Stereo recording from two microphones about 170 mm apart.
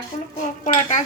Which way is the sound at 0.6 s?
45° left (ahead or behind).